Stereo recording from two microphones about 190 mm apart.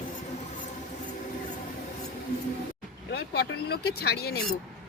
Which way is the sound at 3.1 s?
60° left (ahead or behind).